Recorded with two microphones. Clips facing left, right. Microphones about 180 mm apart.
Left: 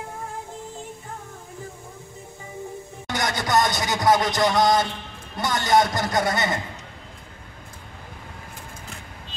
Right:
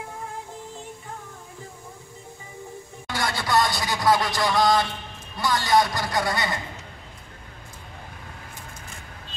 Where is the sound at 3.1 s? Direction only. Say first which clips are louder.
Left 1 dB; 20° left (ahead or behind).